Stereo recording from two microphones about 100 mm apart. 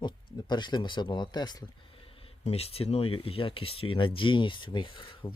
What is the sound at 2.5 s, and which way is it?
Speech, 85° left.